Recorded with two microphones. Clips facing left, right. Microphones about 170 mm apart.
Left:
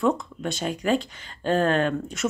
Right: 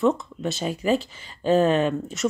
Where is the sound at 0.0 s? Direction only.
Centre (ahead or behind).